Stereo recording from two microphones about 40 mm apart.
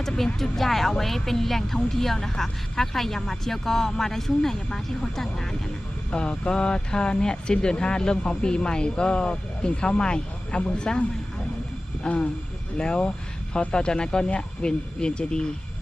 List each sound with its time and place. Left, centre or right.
0.6 s a woman's voice: centre
6.1 s speech: left
12.0 s speech: left